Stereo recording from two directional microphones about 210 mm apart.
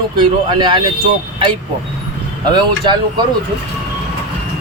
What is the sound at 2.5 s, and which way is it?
Speech, 20° right (ahead or behind).